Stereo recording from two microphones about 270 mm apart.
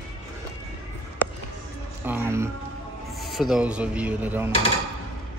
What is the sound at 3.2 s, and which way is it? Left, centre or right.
Speech, centre.